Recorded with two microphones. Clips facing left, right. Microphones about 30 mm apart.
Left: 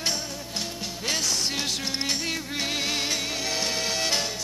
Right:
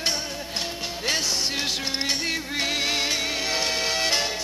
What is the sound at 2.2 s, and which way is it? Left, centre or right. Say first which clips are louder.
Music: right 3 dB; right.